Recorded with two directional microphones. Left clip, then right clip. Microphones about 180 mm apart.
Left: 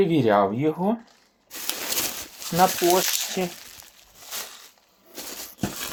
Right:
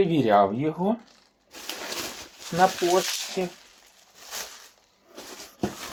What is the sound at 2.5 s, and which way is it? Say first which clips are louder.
Speech: left 2 dB; 60° left (ahead or behind).